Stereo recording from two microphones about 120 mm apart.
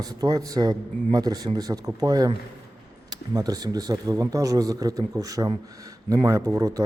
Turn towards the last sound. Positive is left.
turn(degrees=-30)  # may be behind; listen again after turning